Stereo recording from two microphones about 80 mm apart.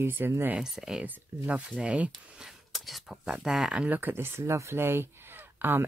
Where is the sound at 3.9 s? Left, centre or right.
Right.